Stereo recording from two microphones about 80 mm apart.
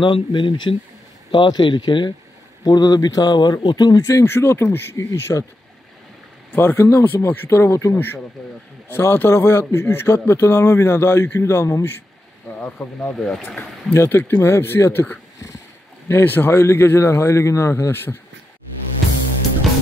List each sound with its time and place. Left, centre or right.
0.0 s speech: left
2.6 s speech: left
4.9 s speech: left
6.5 s speech: left
8.4 s speech: centre
8.9 s speech: left
12.4 s speech: centre
13.9 s speech: left